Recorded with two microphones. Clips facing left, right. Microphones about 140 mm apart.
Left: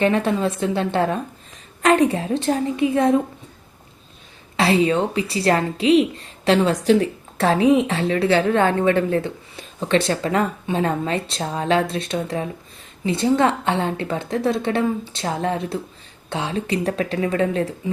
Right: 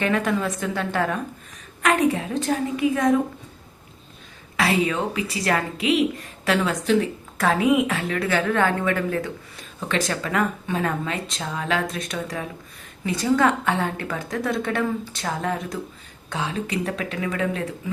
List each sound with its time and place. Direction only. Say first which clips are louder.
0.0 s a woman's voice: left 4 dB; 30° left (ahead or behind)
4.5 s a woman's voice: left 4 dB; 30° left (ahead or behind)